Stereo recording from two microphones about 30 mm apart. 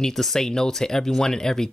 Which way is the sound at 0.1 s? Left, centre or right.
Centre.